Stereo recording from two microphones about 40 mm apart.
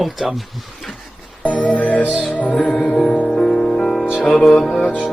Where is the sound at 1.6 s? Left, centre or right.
Left.